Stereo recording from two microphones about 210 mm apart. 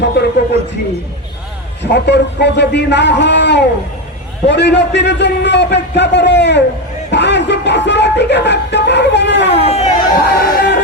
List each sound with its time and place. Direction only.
0.2 s speech: 55° left (ahead or behind)
1.8 s speech: 55° left (ahead or behind)
9.6 s speech: 30° left (ahead or behind)
10.2 s speech: 45° left (ahead or behind)